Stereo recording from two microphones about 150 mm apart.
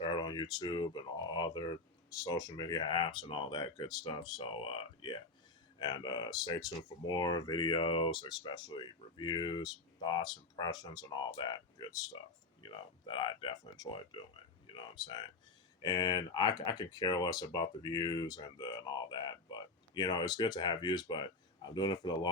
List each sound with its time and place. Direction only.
0.0 s speech: 30° left (ahead or behind)
5.8 s speech: 25° left (ahead or behind)